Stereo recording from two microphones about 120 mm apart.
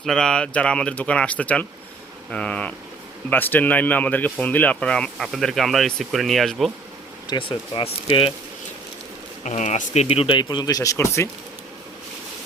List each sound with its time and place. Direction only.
0.0 s speech: 5° left (ahead or behind)
7.3 s speech: 45° left (ahead or behind)
9.4 s speech: 80° left; by 11.3 s 20° left (ahead or behind)